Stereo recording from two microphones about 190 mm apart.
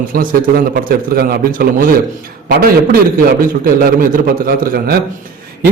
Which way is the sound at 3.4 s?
50° right (ahead or behind).